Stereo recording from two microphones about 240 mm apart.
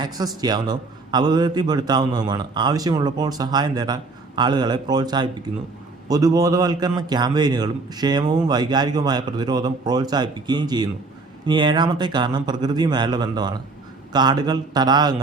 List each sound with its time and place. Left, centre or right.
0.4 s a man's voice: centre